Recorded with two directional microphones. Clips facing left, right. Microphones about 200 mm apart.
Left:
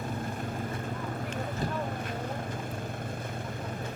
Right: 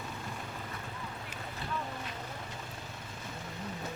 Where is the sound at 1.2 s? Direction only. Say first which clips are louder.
Left 10 dB; 45° left (ahead or behind).